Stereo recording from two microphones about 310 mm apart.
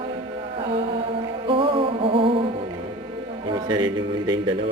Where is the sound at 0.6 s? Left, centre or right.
Centre.